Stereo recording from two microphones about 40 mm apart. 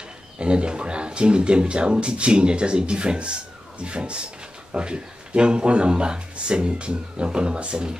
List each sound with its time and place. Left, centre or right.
0.4 s speech: right